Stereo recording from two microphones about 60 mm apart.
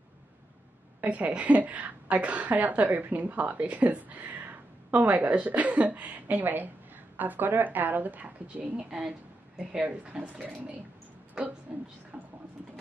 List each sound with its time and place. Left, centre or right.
1.0 s a woman's voice: right
9.6 s a woman's voice: centre
12.1 s vehicle: right